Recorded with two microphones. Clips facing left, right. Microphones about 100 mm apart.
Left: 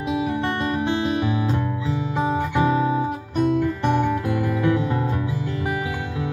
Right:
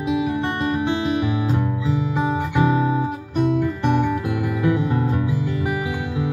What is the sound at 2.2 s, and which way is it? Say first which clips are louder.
Guitar: even; 30° left (ahead or behind).